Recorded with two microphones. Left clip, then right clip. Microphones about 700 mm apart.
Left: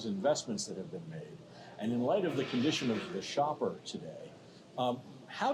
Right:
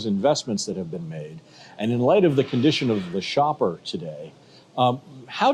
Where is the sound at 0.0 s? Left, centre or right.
Right.